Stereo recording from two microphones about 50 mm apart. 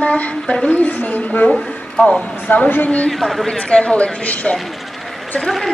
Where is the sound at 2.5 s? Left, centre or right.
Left.